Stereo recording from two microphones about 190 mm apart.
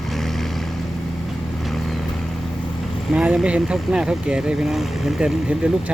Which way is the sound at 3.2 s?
5° right (ahead or behind).